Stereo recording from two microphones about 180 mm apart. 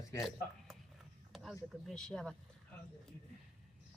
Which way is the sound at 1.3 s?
Centre (ahead or behind).